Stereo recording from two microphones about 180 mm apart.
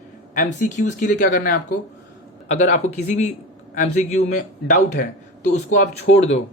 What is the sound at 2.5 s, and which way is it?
Speech, 40° left (ahead or behind).